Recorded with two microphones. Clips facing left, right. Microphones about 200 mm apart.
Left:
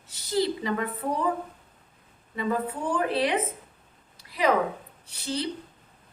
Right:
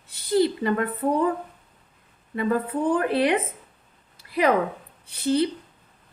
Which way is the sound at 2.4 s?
55° right (ahead or behind).